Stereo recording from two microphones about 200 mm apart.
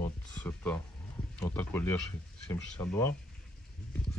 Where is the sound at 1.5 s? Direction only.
10° left (ahead or behind).